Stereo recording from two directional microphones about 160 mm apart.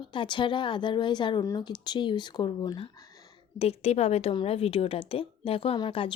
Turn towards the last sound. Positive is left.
turn(degrees=30)  # may be behind; listen again after turning